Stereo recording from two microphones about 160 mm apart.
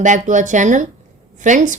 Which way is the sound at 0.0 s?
50° right (ahead or behind).